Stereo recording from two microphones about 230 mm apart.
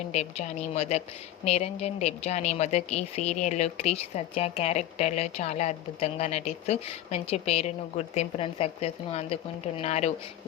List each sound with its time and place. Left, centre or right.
0.1 s speech: left